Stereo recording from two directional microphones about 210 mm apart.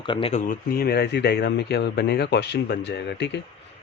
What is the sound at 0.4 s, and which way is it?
A man's voice, 45° left (ahead or behind).